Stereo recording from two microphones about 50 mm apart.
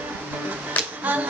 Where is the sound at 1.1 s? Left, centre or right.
Right.